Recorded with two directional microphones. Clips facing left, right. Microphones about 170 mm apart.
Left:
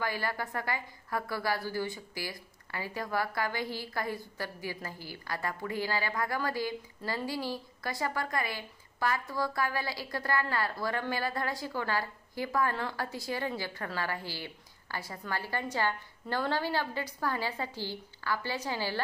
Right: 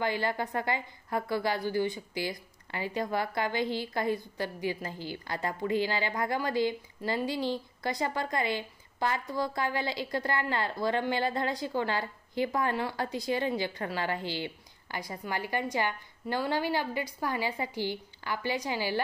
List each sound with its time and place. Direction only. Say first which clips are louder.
0.0 s a woman's voice: right 4 dB; 20° right (ahead or behind)